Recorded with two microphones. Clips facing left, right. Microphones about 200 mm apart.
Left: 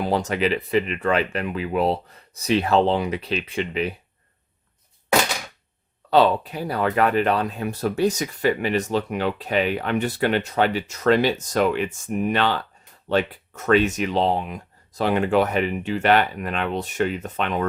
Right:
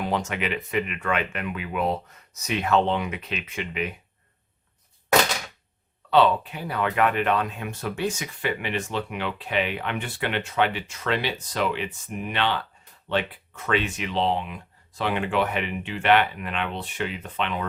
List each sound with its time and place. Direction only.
0.0 s speech: 35° left (ahead or behind)
6.1 s speech: 40° left (ahead or behind)